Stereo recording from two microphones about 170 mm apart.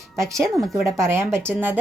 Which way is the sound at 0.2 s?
15° right (ahead or behind).